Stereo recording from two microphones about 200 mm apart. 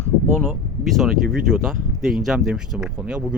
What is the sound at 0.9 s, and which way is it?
Speech, centre (ahead or behind).